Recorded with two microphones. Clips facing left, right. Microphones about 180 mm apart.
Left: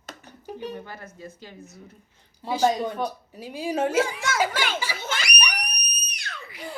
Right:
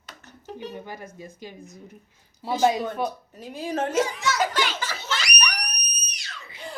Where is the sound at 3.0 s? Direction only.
10° left (ahead or behind).